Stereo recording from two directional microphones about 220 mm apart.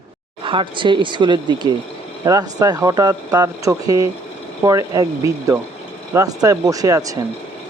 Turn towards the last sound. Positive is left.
turn(degrees=-15)  # may be behind; listen again after turning